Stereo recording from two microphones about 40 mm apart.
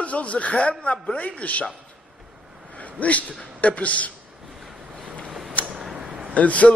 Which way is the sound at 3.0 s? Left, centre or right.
Left.